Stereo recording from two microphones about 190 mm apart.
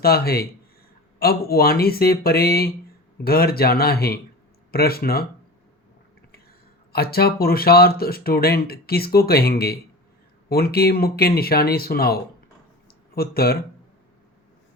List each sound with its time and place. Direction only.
0.0 s speech: 55° left (ahead or behind)
6.9 s speech: 55° left (ahead or behind)